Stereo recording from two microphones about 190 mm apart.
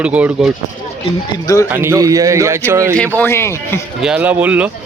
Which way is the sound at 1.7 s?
15° right (ahead or behind).